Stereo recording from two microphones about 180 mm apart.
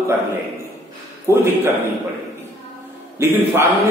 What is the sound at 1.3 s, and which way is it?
Speech, 15° right (ahead or behind).